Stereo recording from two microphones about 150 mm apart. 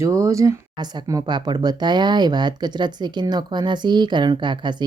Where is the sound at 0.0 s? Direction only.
20° right (ahead or behind).